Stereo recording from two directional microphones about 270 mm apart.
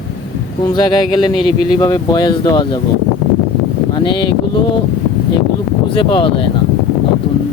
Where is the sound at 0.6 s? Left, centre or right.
Centre.